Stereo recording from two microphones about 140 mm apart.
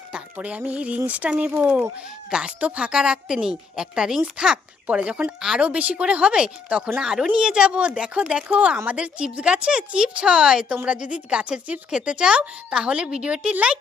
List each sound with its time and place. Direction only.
0.1 s a woman's voice: 10° right (ahead or behind)